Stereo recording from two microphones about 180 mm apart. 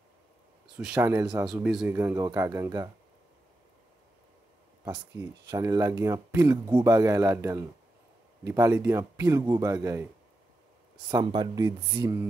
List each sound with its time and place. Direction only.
0.7 s speech: 10° right (ahead or behind)
5.1 s speech: 20° right (ahead or behind)
11.1 s speech: 25° right (ahead or behind)